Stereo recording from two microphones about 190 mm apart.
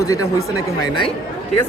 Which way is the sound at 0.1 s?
15° left (ahead or behind).